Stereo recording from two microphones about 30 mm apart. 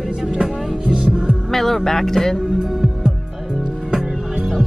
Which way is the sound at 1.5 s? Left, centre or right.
Centre.